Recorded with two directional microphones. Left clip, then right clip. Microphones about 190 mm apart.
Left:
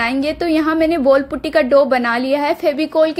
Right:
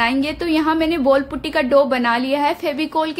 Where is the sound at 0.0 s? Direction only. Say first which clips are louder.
Left 1 dB; 15° left (ahead or behind).